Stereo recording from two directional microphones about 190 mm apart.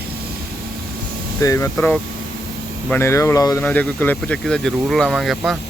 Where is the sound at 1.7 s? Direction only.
5° left (ahead or behind).